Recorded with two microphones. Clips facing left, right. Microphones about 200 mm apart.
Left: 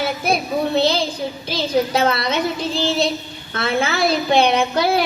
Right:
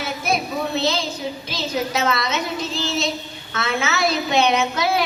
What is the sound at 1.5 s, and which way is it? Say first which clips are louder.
A woman's voice: left 6 dB; 30° left (ahead or behind).